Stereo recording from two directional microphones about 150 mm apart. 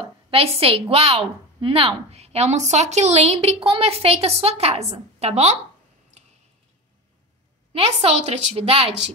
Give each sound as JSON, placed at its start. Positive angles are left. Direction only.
{"t": 0.3, "sound": "a woman's voice", "side_deg": -40}
{"t": 7.7, "sound": "a woman's voice", "side_deg": -40}